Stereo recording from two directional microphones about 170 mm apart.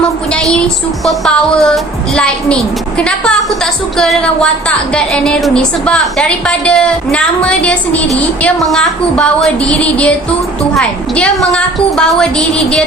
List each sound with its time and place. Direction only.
0.3 s a woman's voice: 5° left (ahead or behind)